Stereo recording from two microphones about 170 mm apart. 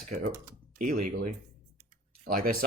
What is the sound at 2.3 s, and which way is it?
Speech, 60° right (ahead or behind).